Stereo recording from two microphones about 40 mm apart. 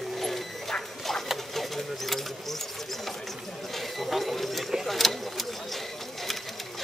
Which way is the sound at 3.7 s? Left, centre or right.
Centre.